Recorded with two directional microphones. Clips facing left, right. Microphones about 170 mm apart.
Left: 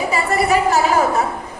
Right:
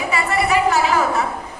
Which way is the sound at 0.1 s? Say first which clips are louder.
Left 1 dB; 40° left (ahead or behind).